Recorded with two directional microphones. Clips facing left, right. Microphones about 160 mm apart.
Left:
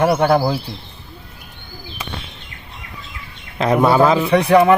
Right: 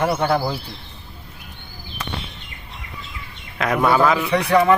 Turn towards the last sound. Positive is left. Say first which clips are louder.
# left 4 dB
turn(degrees=20)  # may be behind; listen again after turning